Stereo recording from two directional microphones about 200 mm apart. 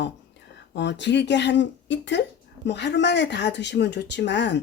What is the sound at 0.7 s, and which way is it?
Speech, 60° left (ahead or behind).